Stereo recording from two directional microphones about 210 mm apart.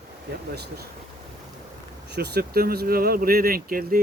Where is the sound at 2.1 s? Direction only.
50° right (ahead or behind).